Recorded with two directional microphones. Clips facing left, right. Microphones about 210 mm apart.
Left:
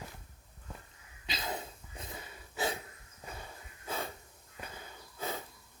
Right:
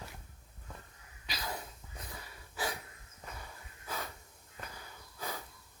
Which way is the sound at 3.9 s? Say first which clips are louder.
Left 3 dB; 25° left (ahead or behind).